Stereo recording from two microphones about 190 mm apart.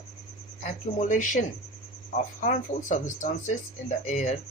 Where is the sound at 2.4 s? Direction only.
40° left (ahead or behind).